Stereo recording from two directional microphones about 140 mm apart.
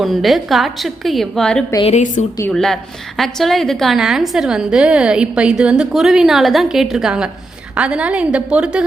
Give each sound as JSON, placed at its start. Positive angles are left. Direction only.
{"t": 0.0, "sound": "a woman's voice", "side_deg": 0}
{"t": 1.8, "sound": "a woman's voice", "side_deg": 55}
{"t": 2.5, "sound": "a woman's voice", "side_deg": 5}